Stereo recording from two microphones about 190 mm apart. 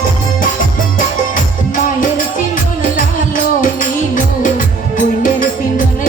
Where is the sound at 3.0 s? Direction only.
45° left (ahead or behind).